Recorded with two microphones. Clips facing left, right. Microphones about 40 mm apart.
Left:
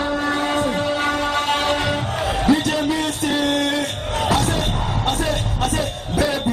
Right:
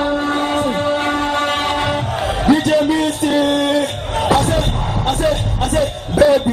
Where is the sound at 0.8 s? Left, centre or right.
Right.